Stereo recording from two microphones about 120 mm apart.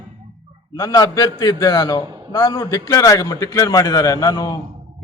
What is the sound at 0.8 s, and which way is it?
A man's voice, 30° left (ahead or behind).